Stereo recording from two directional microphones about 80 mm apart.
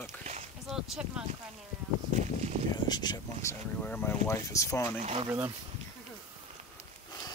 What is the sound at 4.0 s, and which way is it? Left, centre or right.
Speech, left.